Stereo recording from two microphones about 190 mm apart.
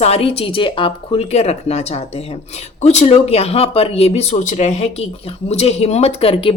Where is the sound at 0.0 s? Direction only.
30° left (ahead or behind).